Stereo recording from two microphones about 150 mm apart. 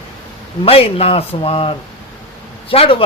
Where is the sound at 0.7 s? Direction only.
40° left (ahead or behind).